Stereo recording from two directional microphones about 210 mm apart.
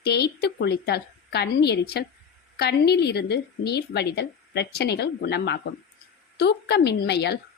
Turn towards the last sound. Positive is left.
turn(degrees=50)  # may be behind; listen again after turning